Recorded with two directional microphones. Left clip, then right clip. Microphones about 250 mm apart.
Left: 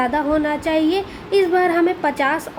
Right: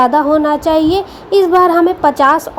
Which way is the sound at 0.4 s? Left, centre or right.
Centre.